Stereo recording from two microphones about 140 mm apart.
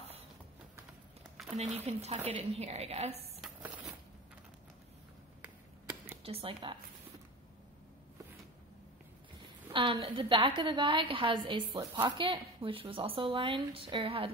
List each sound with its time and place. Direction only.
1.8 s a woman's voice: 50° right (ahead or behind)
6.2 s speech: 40° right (ahead or behind)
9.7 s a sound: 40° right (ahead or behind)
10.0 s speech: 35° right (ahead or behind)